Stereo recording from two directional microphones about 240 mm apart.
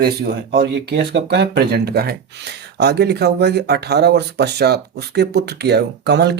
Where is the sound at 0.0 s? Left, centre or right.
Right.